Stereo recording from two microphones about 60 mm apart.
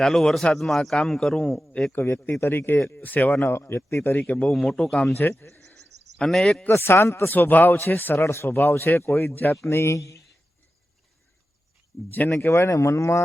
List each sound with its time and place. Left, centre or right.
0.0 s a man's voice: centre
1.9 s speech: left
3.4 s speech: left
4.2 s a man's voice: left
4.4 s a man's voice: centre
5.4 s speech: left
5.6 s bird: centre
6.7 s speech: left
7.3 s speech: left
8.2 s speech: left
8.4 s speech: left
9.6 s speech: left
12.5 s speech: left